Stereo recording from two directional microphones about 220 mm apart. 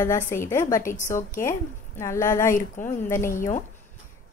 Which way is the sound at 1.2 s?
40° left (ahead or behind).